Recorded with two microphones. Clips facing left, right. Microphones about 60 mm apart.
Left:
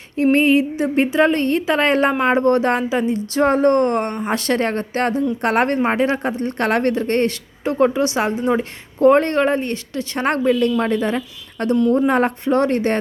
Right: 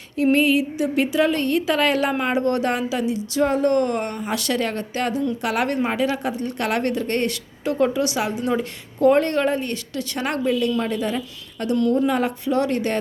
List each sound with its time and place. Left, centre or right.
0.2 s speech: left